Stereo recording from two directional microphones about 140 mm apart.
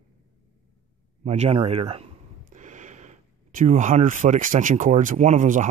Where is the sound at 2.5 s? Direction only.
60° right (ahead or behind).